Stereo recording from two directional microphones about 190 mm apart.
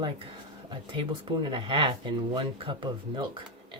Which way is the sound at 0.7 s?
25° right (ahead or behind).